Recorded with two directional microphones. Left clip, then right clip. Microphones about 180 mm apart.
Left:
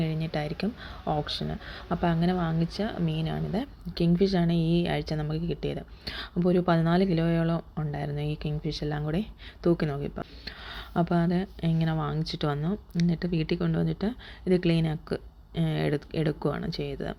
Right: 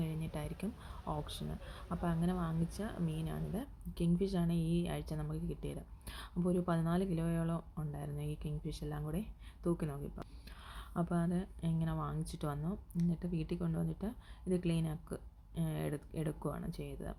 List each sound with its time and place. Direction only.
0.0 s speech: 15° left (ahead or behind)